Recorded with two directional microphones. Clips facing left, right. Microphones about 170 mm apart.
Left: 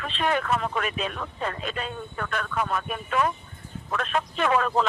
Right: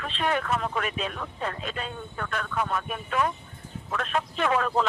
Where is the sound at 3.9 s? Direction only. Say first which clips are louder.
Left 1 dB; 80° left.